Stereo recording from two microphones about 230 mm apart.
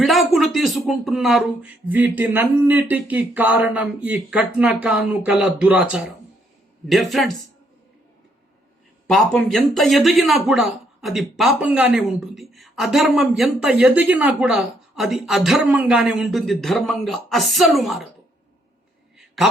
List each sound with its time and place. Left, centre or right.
0.0 s a sound: centre
0.3 s speech: centre
9.0 s speech: centre
19.4 s speech: centre